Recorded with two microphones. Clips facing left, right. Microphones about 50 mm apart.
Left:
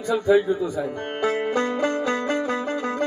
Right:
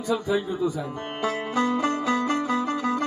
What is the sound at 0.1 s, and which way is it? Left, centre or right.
Speech, left.